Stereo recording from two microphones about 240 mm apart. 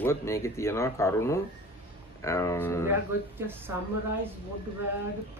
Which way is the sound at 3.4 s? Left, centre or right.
Centre.